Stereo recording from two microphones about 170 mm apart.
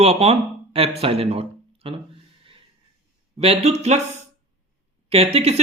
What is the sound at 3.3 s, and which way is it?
Speech, 35° right (ahead or behind).